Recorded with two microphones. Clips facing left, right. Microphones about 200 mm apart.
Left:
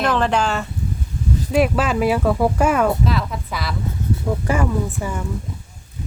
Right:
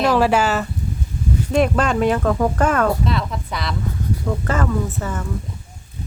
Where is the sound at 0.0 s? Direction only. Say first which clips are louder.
Right 3 dB; 5° right (ahead or behind).